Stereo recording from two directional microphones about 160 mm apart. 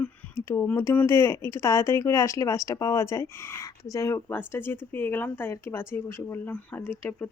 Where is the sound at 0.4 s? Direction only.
15° left (ahead or behind).